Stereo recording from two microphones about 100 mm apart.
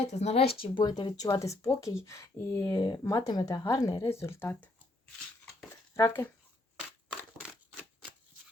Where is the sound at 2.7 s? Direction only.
45° left (ahead or behind).